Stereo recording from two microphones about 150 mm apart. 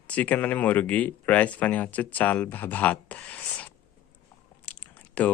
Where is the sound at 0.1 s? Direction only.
10° left (ahead or behind).